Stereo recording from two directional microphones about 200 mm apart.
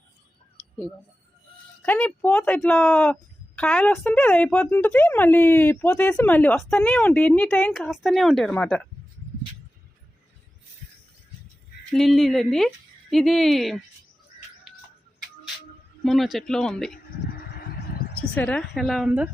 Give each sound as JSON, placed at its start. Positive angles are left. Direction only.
{"t": 1.8, "sound": "speech", "side_deg": 5}
{"t": 11.9, "sound": "speech", "side_deg": 0}
{"t": 16.0, "sound": "speech", "side_deg": 0}
{"t": 16.9, "sound": "a sound", "side_deg": 50}
{"t": 18.3, "sound": "speech", "side_deg": 5}